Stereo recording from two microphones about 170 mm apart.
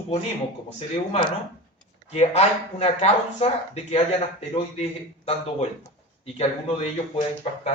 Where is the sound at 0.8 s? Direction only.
35° left (ahead or behind).